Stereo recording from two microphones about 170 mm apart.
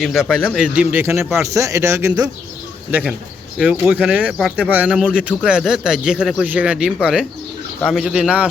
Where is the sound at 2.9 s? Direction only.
5° right (ahead or behind).